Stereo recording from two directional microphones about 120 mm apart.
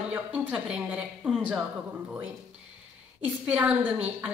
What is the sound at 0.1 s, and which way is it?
A woman's voice, 10° right (ahead or behind).